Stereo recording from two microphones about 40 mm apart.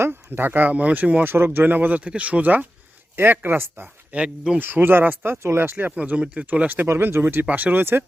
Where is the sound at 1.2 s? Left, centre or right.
Right.